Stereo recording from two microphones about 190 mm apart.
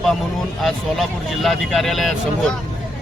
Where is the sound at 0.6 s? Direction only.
Centre (ahead or behind).